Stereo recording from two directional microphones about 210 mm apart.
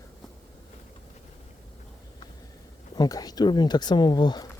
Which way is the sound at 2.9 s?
20° left (ahead or behind).